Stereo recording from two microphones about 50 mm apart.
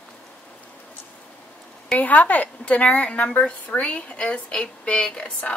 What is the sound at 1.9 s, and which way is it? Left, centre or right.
Speech, left.